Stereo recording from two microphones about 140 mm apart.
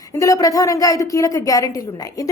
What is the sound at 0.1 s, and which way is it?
A woman's voice, 25° left (ahead or behind).